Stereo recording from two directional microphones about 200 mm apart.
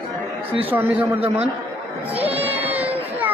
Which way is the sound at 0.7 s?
10° right (ahead or behind).